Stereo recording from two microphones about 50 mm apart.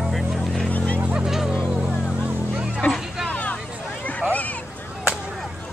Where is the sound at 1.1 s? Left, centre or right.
Centre.